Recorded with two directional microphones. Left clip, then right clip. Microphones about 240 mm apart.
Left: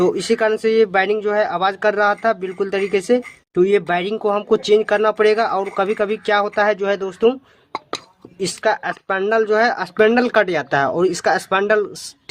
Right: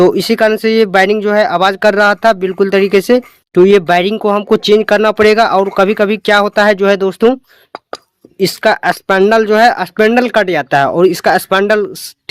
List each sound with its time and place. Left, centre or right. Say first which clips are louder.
0.0 s speech: right 7 dB; right
8.4 s speech: right 8 dB; right